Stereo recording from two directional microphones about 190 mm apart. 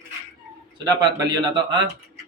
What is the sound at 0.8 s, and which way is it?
Speech, 20° right (ahead or behind).